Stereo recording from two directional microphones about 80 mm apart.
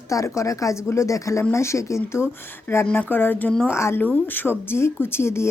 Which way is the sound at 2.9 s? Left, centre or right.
Left.